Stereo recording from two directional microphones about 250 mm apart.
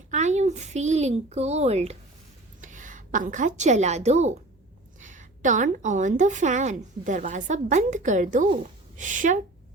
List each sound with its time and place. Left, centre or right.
0.1 s a woman's voice: right